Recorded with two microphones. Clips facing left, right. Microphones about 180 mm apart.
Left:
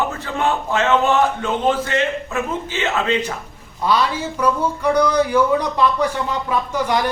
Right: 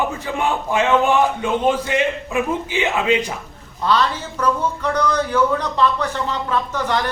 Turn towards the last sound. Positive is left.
turn(degrees=10)  # may be behind; listen again after turning